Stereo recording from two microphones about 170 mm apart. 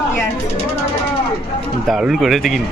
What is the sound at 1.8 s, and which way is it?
Mantra, centre (ahead or behind).